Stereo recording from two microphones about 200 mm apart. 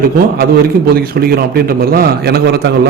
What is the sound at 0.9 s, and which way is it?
A man's voice, 50° right (ahead or behind).